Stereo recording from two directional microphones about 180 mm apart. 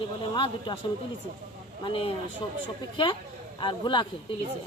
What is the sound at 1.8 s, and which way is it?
Speech, 30° left (ahead or behind).